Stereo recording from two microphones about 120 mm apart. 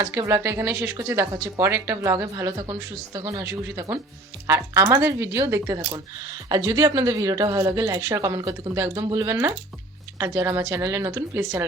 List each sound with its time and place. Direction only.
0.0 s a woman's voice: 25° right (ahead or behind)